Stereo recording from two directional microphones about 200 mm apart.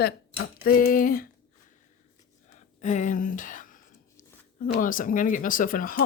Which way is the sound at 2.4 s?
35° left (ahead or behind).